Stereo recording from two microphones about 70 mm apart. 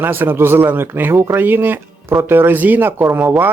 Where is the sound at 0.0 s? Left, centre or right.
Right.